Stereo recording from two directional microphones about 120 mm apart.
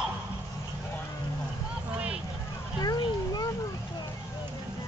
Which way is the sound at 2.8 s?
35° left (ahead or behind).